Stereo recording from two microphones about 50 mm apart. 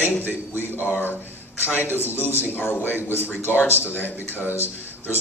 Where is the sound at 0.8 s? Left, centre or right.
Left.